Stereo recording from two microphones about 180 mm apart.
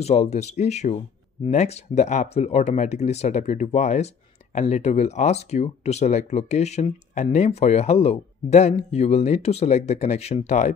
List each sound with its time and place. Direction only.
0.0 s speech: 40° left (ahead or behind)